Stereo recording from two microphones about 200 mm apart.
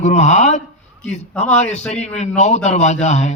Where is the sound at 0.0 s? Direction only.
35° left (ahead or behind).